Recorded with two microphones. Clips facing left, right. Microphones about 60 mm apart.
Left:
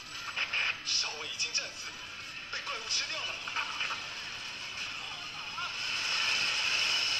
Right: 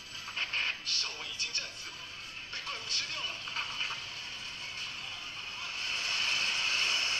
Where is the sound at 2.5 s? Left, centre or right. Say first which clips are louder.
Left 2 dB; centre.